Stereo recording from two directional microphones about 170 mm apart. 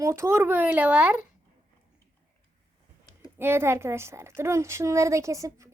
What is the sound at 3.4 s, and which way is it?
A woman's voice, 15° right (ahead or behind).